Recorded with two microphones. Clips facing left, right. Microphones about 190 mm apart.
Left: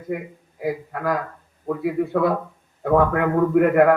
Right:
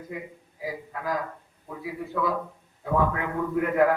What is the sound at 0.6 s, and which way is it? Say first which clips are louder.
A man's voice: left 8 dB; 60° left (ahead or behind).